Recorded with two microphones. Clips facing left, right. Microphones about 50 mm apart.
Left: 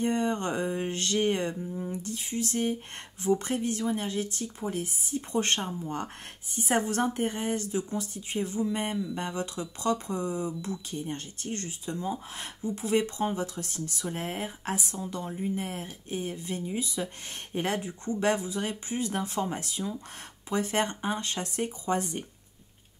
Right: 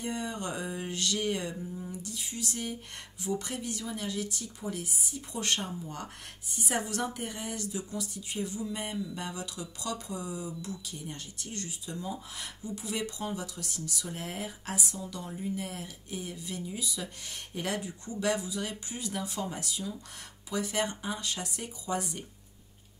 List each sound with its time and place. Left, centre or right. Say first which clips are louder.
0.0 s speech: left 7 dB; left
1.6 s a sound: left 4 dB; centre
1.9 s speech: left 5 dB; left